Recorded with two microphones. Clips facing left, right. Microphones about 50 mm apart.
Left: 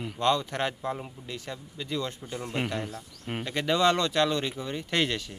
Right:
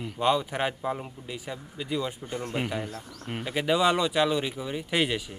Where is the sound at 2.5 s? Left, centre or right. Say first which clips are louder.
Left 1 dB; centre.